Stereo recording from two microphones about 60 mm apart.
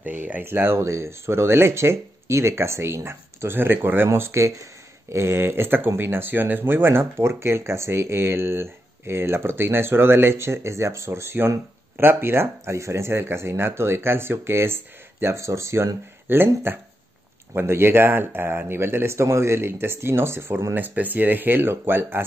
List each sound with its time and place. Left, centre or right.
0.0 s speech: right
16.3 s speech: right
20.7 s speech: right